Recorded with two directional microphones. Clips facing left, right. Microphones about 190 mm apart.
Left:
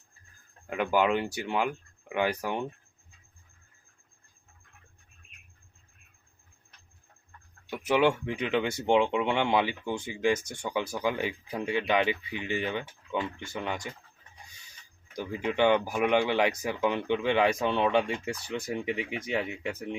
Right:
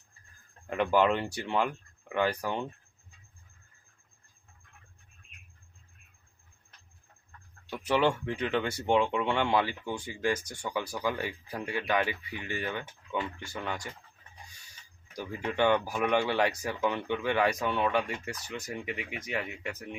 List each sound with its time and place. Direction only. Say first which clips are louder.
0.7 s speech: even; 5° left (ahead or behind)
7.7 s speech: left 2 dB; 10° left (ahead or behind)
15.1 s speech: left 3 dB; 15° left (ahead or behind)